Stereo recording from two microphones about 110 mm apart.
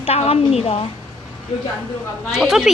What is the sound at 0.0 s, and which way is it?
Speech, 65° left (ahead or behind).